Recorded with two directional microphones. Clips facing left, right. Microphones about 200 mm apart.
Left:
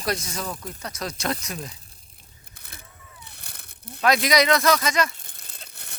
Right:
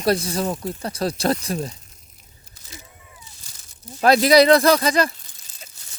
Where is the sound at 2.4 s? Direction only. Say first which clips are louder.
Right 5 dB; 55° left (ahead or behind).